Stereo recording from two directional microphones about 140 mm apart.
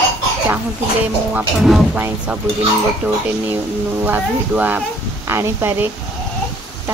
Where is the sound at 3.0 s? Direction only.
15° right (ahead or behind).